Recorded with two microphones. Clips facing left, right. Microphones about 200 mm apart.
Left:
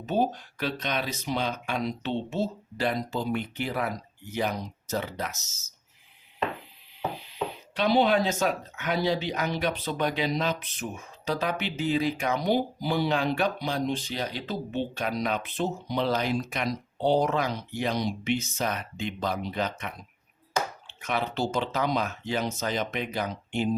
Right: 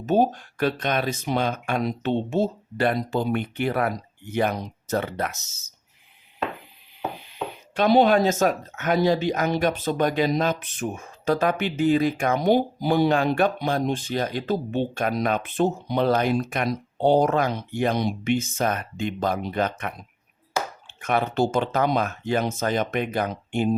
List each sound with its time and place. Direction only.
0.0 s speech: 50° right (ahead or behind)
7.8 s speech: 45° right (ahead or behind)